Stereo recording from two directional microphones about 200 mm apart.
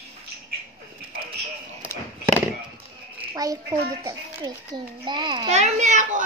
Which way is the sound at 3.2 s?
20° right (ahead or behind).